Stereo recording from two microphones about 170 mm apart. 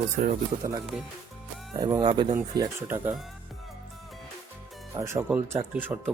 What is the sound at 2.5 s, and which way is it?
Speech, 15° right (ahead or behind).